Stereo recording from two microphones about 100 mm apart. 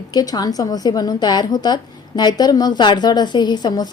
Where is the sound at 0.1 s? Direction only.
40° left (ahead or behind).